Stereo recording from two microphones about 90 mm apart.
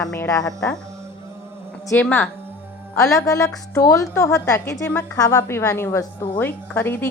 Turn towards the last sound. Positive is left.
turn(degrees=25)  # may be behind; listen again after turning